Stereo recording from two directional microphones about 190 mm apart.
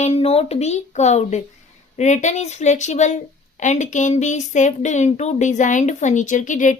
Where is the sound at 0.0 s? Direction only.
30° left (ahead or behind).